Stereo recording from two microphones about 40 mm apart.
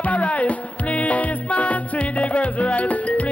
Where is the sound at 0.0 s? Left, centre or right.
Left.